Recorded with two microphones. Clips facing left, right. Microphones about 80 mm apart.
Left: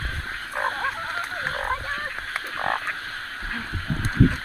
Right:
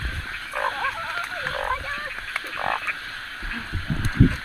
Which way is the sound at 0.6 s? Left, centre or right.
Left.